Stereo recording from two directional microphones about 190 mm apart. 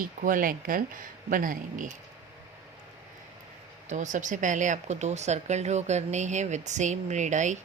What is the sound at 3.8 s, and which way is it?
Speech, 40° right (ahead or behind).